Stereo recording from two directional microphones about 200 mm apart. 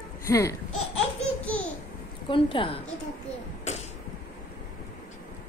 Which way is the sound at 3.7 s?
35° left (ahead or behind).